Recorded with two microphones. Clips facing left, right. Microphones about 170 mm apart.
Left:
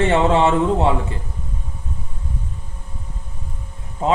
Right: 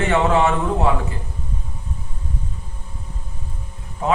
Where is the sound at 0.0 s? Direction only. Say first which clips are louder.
Left 2 dB; 30° left (ahead or behind).